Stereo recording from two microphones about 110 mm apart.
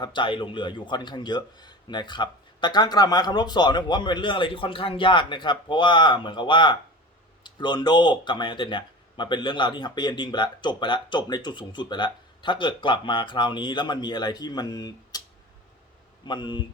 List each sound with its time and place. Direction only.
0.0 s speech: 45° left (ahead or behind)
16.2 s speech: 45° left (ahead or behind)